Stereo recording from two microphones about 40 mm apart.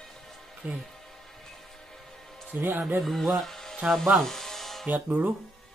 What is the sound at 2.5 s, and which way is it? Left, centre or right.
Speech, right.